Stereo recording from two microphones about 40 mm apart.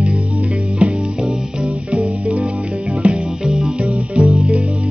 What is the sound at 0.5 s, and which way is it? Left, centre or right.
Music, centre.